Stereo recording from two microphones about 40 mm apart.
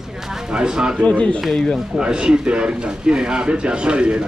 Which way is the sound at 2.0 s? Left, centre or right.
Right.